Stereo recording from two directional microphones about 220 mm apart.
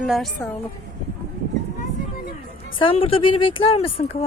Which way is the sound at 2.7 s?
25° left (ahead or behind).